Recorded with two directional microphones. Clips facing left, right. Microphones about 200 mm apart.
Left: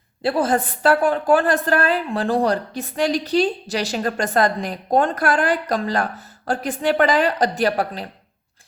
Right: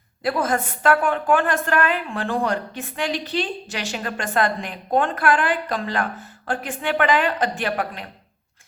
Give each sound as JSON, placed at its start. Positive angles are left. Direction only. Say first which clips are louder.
{"t": 0.2, "sound": "a woman's voice", "louder": "left 3 dB", "side_deg": 30}